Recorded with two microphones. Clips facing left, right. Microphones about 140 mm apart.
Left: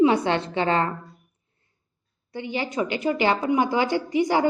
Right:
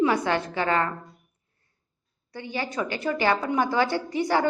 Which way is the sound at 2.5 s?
15° left (ahead or behind).